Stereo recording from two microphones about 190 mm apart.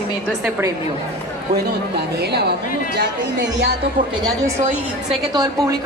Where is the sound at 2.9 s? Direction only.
60° right (ahead or behind).